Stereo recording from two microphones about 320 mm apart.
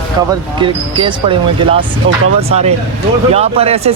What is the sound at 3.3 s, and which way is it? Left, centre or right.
Speech, centre.